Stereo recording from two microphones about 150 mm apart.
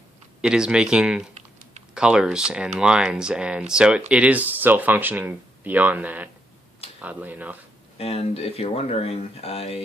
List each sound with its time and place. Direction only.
0.4 s speech: 5° right (ahead or behind)
1.3 s typing: 50° right (ahead or behind)
2.0 s speech: 5° right (ahead or behind)
7.9 s speech: 40° left (ahead or behind)